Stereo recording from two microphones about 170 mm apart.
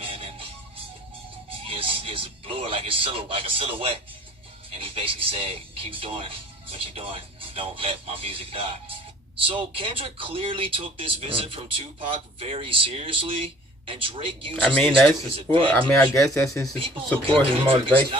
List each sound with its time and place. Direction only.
0.0 s music: 35° right (ahead or behind)
1.5 s speech: 30° right (ahead or behind)
15.5 s speech: 30° right (ahead or behind)
15.9 s speech: 15° left (ahead or behind)
16.7 s speech: 30° right (ahead or behind)